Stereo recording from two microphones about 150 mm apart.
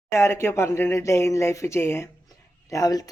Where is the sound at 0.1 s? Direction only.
20° left (ahead or behind).